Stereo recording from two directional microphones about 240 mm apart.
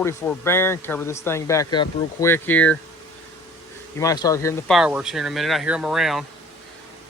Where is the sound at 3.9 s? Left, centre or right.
Centre.